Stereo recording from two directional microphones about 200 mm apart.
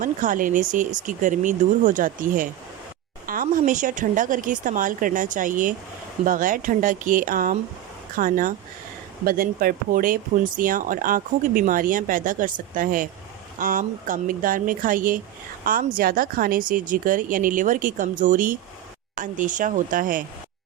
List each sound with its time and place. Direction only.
0.0 s speech: 40° right (ahead or behind)